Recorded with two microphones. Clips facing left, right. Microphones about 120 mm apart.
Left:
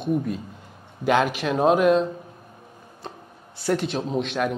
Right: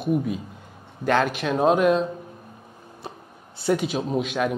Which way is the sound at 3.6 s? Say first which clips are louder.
Right 1 dB; 5° right (ahead or behind).